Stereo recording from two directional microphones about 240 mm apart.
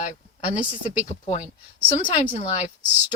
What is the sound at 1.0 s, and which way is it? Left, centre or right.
Speech, left.